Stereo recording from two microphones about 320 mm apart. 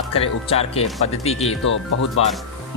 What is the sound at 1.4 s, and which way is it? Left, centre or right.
Speech, left.